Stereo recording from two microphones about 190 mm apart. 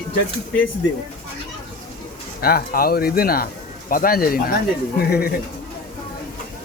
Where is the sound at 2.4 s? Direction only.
50° left (ahead or behind).